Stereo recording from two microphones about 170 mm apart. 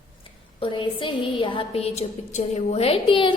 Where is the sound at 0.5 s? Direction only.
30° left (ahead or behind).